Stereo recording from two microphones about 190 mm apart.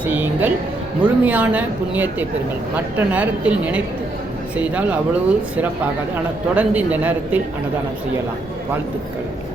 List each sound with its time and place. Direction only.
0.0 s music: 10° right (ahead or behind)
1.0 s speech: 10° right (ahead or behind)